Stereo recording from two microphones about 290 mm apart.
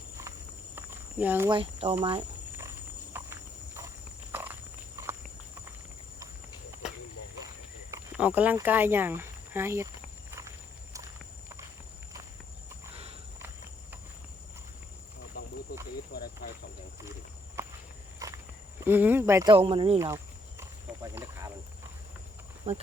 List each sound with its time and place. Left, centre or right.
0.8 s a sound: centre
3.8 s horse: centre
7.9 s speech: centre
16.1 s a sound: left
17.6 s walk: centre
18.9 s cricket: centre
22.7 s speech: right